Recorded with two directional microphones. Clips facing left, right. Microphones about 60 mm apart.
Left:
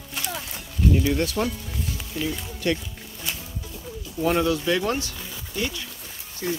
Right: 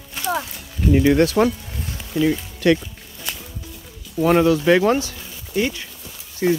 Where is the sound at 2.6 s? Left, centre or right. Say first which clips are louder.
Right 8 dB; right.